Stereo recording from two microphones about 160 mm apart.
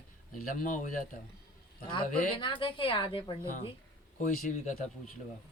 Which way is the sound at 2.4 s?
30° left (ahead or behind).